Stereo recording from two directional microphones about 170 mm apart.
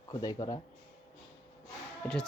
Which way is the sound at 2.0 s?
10° left (ahead or behind).